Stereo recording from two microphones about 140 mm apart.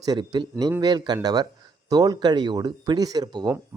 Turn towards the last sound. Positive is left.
turn(degrees=-30)  # may be behind; listen again after turning